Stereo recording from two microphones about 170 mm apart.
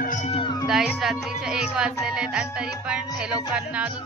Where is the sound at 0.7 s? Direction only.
5° right (ahead or behind).